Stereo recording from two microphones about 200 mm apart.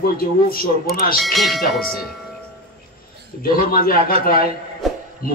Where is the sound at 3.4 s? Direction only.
45° left (ahead or behind).